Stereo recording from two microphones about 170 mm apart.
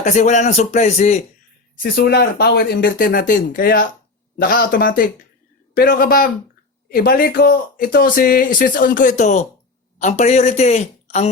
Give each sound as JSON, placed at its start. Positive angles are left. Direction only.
{"t": 0.0, "sound": "speech", "side_deg": 45}
{"t": 1.8, "sound": "speech", "side_deg": 65}